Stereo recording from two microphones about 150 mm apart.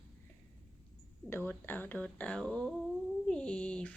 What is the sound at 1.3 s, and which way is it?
Speech, 15° left (ahead or behind).